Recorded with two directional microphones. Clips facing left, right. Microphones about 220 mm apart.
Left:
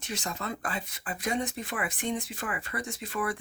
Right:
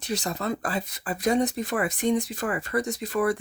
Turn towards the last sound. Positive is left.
turn(degrees=-40)  # may be behind; listen again after turning